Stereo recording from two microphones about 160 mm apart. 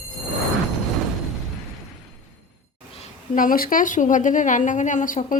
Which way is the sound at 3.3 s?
60° left (ahead or behind).